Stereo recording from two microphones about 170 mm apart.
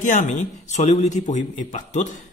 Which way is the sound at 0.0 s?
50° left (ahead or behind).